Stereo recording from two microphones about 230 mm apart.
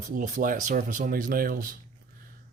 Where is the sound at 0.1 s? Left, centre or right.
Right.